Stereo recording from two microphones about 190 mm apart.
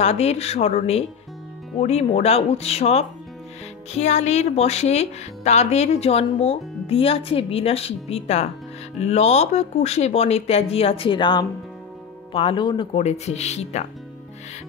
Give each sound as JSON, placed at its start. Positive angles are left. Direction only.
{"t": 0.0, "sound": "speech", "side_deg": 35}